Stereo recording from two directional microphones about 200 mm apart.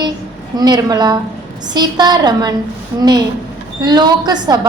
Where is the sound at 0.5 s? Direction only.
20° right (ahead or behind).